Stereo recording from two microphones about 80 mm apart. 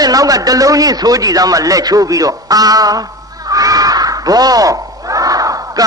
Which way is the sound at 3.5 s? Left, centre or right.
Right.